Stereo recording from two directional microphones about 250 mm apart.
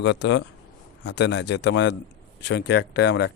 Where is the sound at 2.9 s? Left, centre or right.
Left.